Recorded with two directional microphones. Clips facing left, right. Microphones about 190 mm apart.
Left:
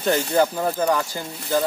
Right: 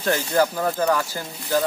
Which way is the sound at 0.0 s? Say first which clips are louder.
Left 1 dB; 20° left (ahead or behind).